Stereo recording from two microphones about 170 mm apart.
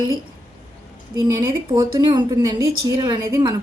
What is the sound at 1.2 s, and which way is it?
A woman's voice, 20° right (ahead or behind).